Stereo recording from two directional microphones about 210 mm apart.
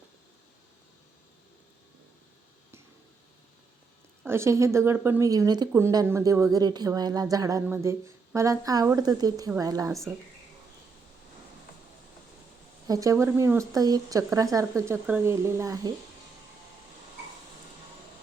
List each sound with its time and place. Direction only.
4.2 s speech: 10° right (ahead or behind)
12.9 s speech: 15° right (ahead or behind)